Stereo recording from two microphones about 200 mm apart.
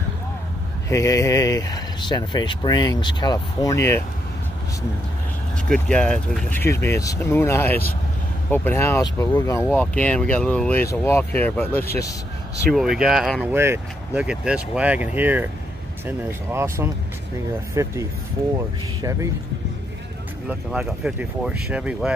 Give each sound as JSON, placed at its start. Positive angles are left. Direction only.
{"t": 0.8, "sound": "speech", "side_deg": 15}
{"t": 5.7, "sound": "speech", "side_deg": 5}
{"t": 12.7, "sound": "speech", "side_deg": 0}
{"t": 18.9, "sound": "speech", "side_deg": -15}
{"t": 20.4, "sound": "speech", "side_deg": -5}